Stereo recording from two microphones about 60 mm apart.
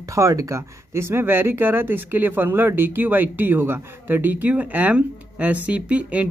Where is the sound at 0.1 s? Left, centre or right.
Right.